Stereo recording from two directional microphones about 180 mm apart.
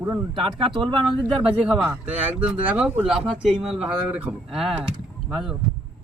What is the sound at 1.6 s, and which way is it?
Speech, 5° right (ahead or behind).